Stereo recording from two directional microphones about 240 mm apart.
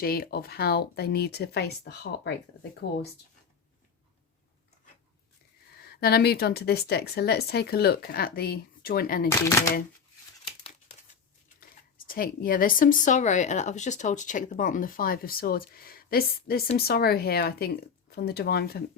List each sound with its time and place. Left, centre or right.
0.0 s speech: left
5.8 s speech: left
12.0 s speech: left